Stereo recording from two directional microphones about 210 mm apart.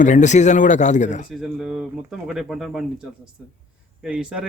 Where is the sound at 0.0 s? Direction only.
35° left (ahead or behind).